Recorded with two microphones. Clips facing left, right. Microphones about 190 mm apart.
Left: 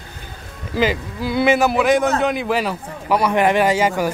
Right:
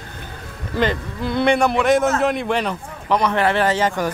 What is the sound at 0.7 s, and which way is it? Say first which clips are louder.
A man's voice: left 1 dB; 5° left (ahead or behind).